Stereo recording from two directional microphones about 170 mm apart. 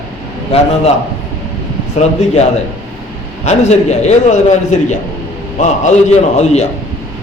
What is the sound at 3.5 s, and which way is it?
A man's voice, 40° left (ahead or behind).